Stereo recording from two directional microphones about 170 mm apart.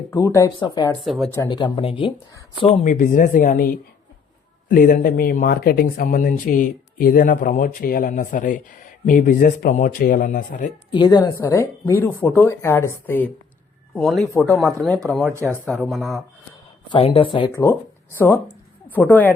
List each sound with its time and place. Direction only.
0.1 s speech: 20° left (ahead or behind)
1.0 s speech: centre (ahead or behind)
1.5 s speech: 25° left (ahead or behind)
2.8 s speech: 50° left (ahead or behind)
10.9 s speech: 25° left (ahead or behind)
13.9 s speech: centre (ahead or behind)
15.3 s speech: 15° right (ahead or behind)
15.8 s speech: centre (ahead or behind)
16.9 s speech: 30° left (ahead or behind)
17.5 s speech: 15° left (ahead or behind)